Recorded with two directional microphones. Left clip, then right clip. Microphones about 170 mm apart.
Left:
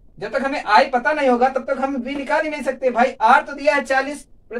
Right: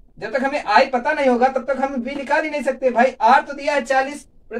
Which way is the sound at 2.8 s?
20° left (ahead or behind).